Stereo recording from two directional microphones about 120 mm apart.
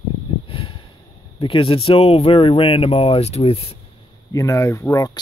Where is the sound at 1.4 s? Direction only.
50° left (ahead or behind).